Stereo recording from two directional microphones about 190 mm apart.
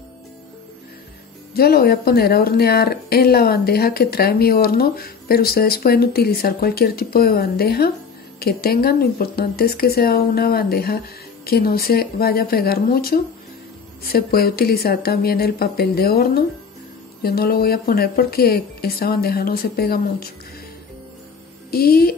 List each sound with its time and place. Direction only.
1.5 s speech: 55° left (ahead or behind)
21.6 s speech: 55° left (ahead or behind)